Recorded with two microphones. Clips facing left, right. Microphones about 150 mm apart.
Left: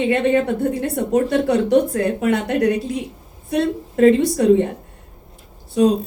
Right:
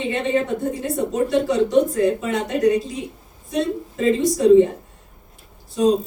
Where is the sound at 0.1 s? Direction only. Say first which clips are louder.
Left 1 dB; 65° left (ahead or behind).